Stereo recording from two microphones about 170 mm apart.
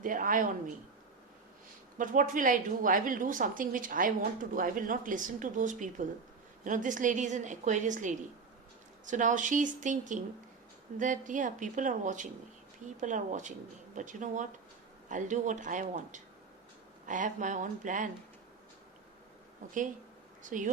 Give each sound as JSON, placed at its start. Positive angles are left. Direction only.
{"t": 0.0, "sound": "a woman's voice", "side_deg": -50}
{"t": 2.0, "sound": "a woman's voice", "side_deg": -50}
{"t": 20.4, "sound": "speech", "side_deg": -50}